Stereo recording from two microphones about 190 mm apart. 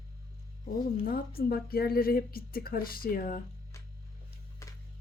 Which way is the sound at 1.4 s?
55° left (ahead or behind).